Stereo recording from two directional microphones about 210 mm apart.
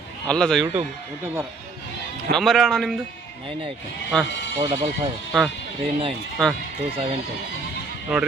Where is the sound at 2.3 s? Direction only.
Centre (ahead or behind).